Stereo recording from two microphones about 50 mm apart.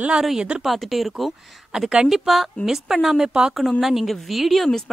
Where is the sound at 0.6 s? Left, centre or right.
Centre.